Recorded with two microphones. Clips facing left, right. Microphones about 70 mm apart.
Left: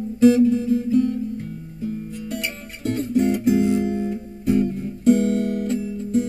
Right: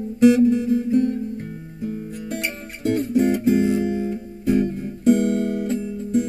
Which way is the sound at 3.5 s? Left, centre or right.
Right.